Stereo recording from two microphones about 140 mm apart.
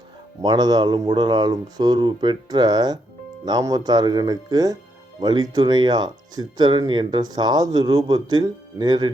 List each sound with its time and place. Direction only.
0.4 s speech: 30° right (ahead or behind)